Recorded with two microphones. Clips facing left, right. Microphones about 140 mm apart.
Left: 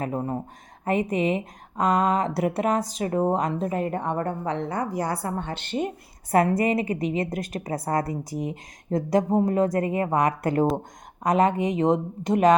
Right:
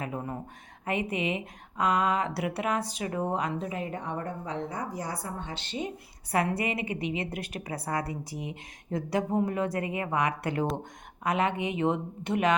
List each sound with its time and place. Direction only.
0.0 s a woman's voice: 35° left (ahead or behind); by 5.9 s 55° left (ahead or behind)
6.3 s a woman's voice: 45° left (ahead or behind)